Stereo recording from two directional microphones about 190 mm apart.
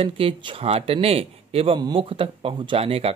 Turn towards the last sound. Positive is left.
turn(degrees=-30)  # may be behind; listen again after turning